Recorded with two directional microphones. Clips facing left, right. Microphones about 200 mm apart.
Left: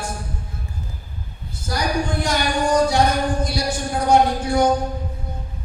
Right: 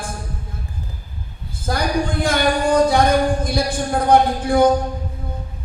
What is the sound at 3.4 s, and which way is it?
Speech, 55° right (ahead or behind).